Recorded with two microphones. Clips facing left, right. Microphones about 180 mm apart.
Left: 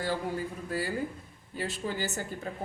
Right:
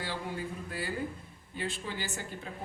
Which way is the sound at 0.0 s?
45° left (ahead or behind).